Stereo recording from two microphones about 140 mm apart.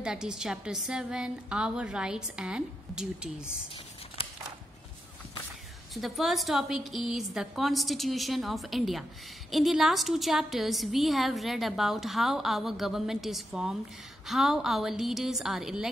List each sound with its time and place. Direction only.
0.0 s a woman's voice: 5° right (ahead or behind)
5.9 s a woman's voice: centre (ahead or behind)